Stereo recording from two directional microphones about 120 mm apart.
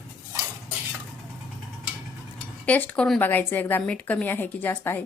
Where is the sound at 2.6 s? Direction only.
15° left (ahead or behind).